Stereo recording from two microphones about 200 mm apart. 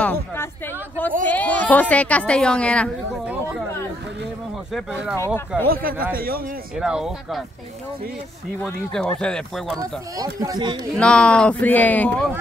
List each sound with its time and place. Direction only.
0.0 s a sound: 5° left (ahead or behind)
1.2 s a woman's voice: 10° left (ahead or behind)
5.1 s a woman's voice: 15° left (ahead or behind)
5.7 s speech: 45° right (ahead or behind)
6.8 s speech: centre (ahead or behind)
8.5 s speech: 5° left (ahead or behind)
9.8 s speech: 15° right (ahead or behind)
11.0 s speech: 5° left (ahead or behind)